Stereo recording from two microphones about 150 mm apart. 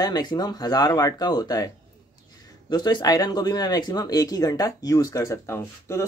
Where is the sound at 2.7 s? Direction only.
25° left (ahead or behind).